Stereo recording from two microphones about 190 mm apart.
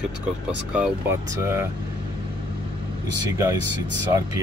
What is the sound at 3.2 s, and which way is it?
Speech, 15° right (ahead or behind).